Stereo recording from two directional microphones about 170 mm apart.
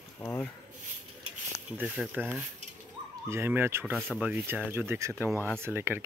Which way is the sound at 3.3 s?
15° right (ahead or behind).